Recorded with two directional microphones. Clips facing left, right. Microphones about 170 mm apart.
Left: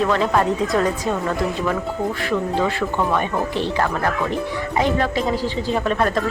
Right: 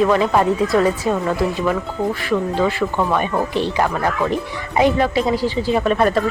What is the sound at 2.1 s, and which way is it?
A woman's voice, 5° right (ahead or behind).